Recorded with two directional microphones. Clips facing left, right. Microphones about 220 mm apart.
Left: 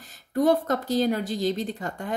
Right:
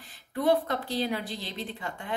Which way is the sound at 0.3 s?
45° left (ahead or behind).